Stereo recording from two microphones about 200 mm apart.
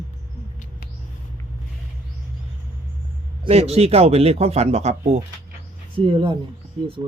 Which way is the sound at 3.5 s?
30° right (ahead or behind).